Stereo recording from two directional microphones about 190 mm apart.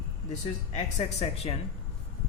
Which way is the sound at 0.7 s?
40° left (ahead or behind).